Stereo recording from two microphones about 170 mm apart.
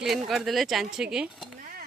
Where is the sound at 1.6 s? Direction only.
55° right (ahead or behind).